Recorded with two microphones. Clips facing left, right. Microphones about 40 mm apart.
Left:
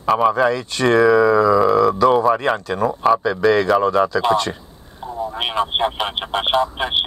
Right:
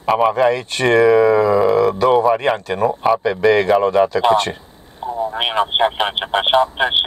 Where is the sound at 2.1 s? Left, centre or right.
Centre.